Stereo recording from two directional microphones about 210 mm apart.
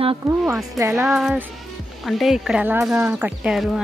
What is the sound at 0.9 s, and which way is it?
Speech, centre (ahead or behind).